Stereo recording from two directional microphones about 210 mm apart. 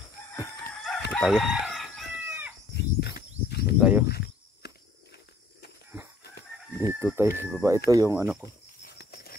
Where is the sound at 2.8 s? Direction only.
50° left (ahead or behind).